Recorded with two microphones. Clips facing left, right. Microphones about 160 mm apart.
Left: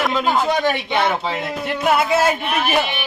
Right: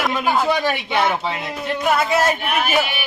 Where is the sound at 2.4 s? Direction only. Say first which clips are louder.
Even; 5° right (ahead or behind).